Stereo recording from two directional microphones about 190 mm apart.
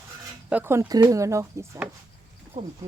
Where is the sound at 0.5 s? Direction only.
10° right (ahead or behind).